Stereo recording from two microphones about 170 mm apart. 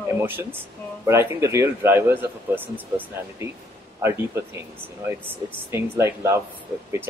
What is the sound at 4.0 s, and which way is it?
Speech, 15° right (ahead or behind).